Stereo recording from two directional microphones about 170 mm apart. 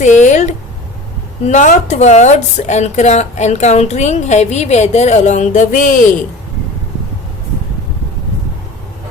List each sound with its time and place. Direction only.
0.0 s a woman's voice: 45° left (ahead or behind)